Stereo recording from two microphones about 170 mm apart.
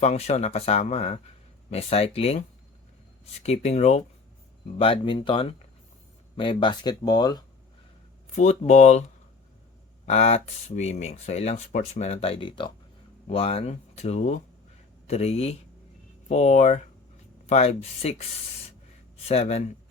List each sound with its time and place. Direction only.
0.0 s speech: 40° left (ahead or behind)
3.4 s speech: 40° left (ahead or behind)
4.8 s speech: 30° left (ahead or behind)
8.4 s speech: 45° left (ahead or behind)
10.1 s speech: 40° left (ahead or behind)
19.1 s speech: 35° left (ahead or behind)